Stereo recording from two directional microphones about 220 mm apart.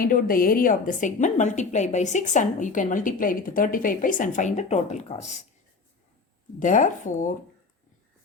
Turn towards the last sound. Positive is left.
turn(degrees=35)  # may be behind; listen again after turning